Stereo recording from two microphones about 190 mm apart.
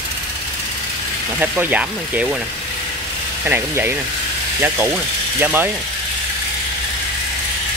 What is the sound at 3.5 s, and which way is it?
Speech, 10° right (ahead or behind).